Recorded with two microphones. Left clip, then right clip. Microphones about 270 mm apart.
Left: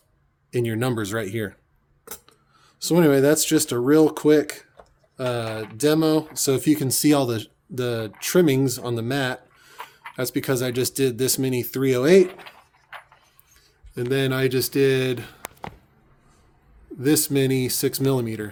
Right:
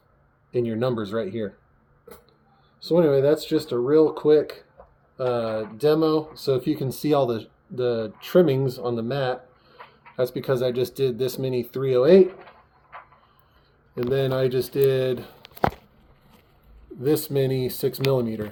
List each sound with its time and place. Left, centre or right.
0.5 s speech: left
2.7 s speech: left
13.9 s speech: left
17.0 s speech: left